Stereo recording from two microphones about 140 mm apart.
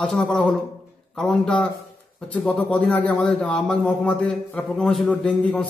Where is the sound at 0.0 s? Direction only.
5° left (ahead or behind).